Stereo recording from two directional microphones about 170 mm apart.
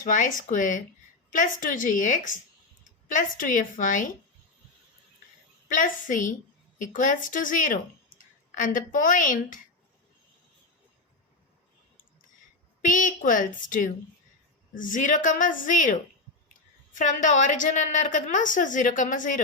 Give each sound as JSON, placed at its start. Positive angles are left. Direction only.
{"t": 0.0, "sound": "a woman's voice", "side_deg": 50}
{"t": 5.6, "sound": "a woman's voice", "side_deg": 50}
{"t": 12.8, "sound": "a woman's voice", "side_deg": 50}